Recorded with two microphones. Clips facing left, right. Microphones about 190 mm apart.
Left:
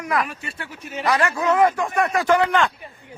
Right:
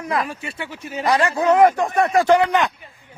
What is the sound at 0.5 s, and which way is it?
Speech, 80° right.